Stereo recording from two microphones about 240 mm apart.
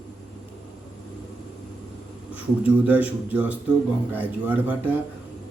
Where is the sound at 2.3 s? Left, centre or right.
Centre.